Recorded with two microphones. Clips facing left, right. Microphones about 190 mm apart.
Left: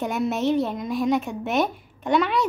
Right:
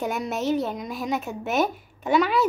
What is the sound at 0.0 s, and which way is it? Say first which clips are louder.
A woman's voice: left 3 dB; centre (ahead or behind).